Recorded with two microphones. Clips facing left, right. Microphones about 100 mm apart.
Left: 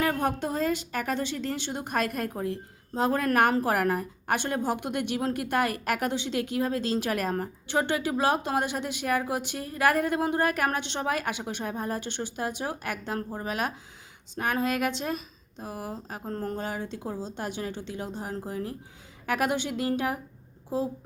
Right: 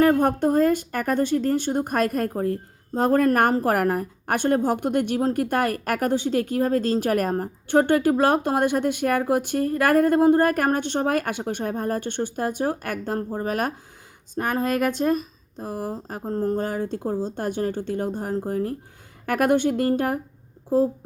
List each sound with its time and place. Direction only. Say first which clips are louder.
0.0 s a woman's voice: right 9 dB; 45° right (ahead or behind)
16.2 s speech: right 9 dB; 30° right (ahead or behind)
16.6 s a woman's voice: right 7 dB; 45° right (ahead or behind)